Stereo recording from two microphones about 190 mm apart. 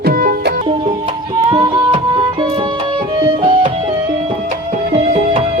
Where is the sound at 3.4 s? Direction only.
25° right (ahead or behind).